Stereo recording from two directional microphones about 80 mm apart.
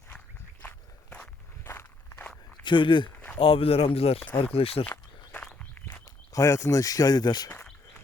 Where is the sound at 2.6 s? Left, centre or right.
Left.